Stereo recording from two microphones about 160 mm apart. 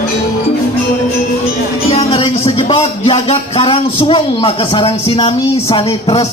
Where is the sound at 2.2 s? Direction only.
30° left (ahead or behind).